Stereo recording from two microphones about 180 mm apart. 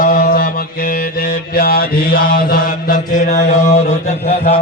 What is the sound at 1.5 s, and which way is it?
Mantra, 55° left (ahead or behind).